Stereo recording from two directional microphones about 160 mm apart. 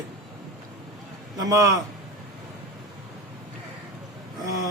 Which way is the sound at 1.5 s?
20° right (ahead or behind).